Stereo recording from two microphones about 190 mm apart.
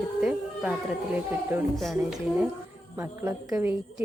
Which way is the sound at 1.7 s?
Centre (ahead or behind).